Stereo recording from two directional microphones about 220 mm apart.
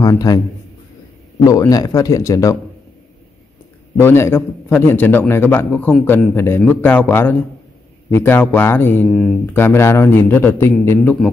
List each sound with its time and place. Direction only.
0.0 s a man's voice: 15° left (ahead or behind)
1.4 s a man's voice: 15° left (ahead or behind)
4.0 s a man's voice: 10° left (ahead or behind)